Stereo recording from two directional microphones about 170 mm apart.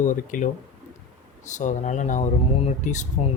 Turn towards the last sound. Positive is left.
turn(degrees=45)  # may be behind; listen again after turning